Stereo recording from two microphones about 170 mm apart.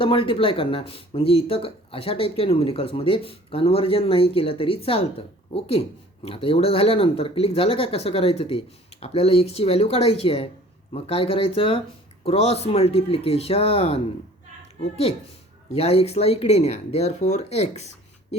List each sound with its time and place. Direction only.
0.0 s speech: 30° left (ahead or behind)
15.7 s speech: 35° left (ahead or behind)